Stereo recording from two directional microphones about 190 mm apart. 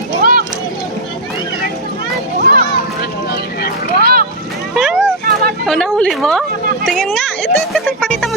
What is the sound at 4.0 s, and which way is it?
Boat, 55° right (ahead or behind).